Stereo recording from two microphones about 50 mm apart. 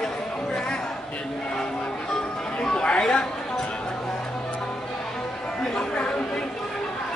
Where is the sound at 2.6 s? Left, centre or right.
Centre.